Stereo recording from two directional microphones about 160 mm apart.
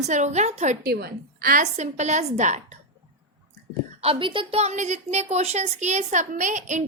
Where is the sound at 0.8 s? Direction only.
75° right (ahead or behind).